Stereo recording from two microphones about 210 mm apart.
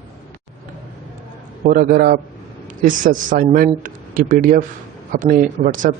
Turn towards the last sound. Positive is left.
turn(degrees=-40)  # may be behind; listen again after turning